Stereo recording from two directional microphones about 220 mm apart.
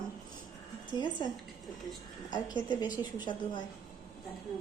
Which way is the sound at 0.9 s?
15° right (ahead or behind).